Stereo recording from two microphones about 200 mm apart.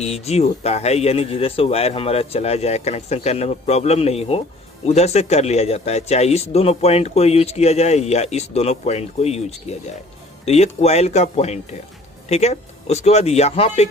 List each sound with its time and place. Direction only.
0.0 s speech: 30° left (ahead or behind)